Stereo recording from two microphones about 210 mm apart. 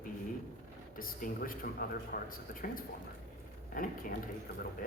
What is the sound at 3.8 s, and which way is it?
Speech, 45° left (ahead or behind).